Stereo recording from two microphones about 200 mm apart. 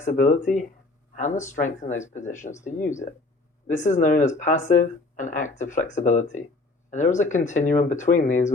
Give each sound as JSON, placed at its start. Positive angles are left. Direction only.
{"t": 0.0, "sound": "speech", "side_deg": 40}
{"t": 3.7, "sound": "speech", "side_deg": 35}